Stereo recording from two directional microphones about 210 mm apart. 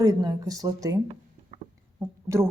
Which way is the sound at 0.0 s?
20° right (ahead or behind).